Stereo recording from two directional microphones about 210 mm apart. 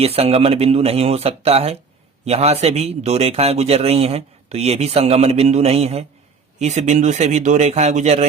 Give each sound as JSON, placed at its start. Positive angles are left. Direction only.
{"t": 0.0, "sound": "a man's voice", "side_deg": -30}